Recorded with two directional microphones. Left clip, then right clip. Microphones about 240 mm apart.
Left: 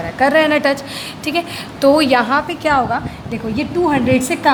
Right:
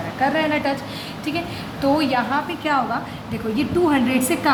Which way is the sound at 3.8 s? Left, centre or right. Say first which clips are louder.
Left 7 dB; left.